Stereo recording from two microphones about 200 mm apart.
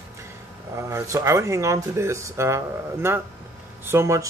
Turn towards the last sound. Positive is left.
turn(degrees=-15)  # may be behind; listen again after turning